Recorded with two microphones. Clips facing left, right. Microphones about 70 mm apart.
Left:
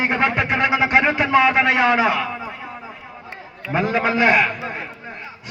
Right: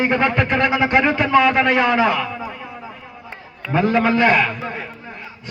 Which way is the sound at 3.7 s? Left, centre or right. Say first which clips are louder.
Right 3 dB; centre.